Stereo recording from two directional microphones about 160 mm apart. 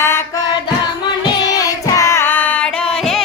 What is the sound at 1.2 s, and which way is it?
Singing, 25° left (ahead or behind).